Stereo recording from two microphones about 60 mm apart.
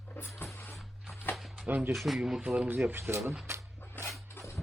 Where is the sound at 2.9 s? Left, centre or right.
Right.